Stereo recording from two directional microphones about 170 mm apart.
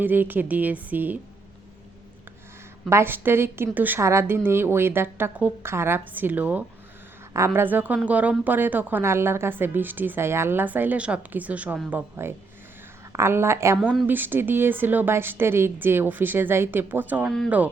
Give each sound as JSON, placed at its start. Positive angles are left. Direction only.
{"t": 0.0, "sound": "a woman's voice", "side_deg": -10}
{"t": 2.9, "sound": "a woman's voice", "side_deg": -15}
{"t": 13.7, "sound": "a woman's voice", "side_deg": 0}
{"t": 14.1, "sound": "a woman's voice", "side_deg": -10}